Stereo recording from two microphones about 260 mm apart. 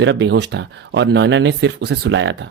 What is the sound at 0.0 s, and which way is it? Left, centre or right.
Speech, right.